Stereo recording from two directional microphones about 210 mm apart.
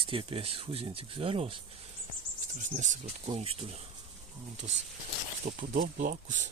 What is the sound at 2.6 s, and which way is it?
Speech, 35° right (ahead or behind).